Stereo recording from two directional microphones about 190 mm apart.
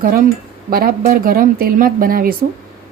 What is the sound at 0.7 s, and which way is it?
Speech, 50° right (ahead or behind).